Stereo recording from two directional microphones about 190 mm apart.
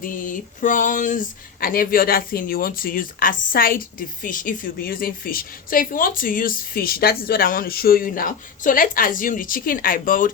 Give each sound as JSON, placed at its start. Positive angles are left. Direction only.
{"t": 0.0, "sound": "a woman's voice", "side_deg": 45}